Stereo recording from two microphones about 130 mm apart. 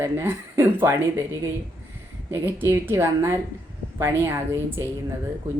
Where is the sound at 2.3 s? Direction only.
20° right (ahead or behind).